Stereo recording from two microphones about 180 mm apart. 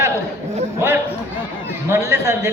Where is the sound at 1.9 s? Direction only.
15° right (ahead or behind).